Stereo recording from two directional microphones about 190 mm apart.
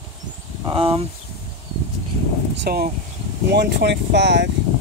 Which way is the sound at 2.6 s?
50° right (ahead or behind).